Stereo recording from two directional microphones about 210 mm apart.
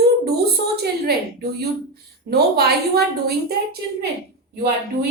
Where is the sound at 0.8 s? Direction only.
50° right (ahead or behind).